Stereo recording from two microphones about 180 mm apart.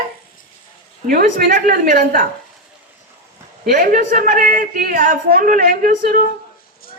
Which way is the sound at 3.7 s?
50° right (ahead or behind).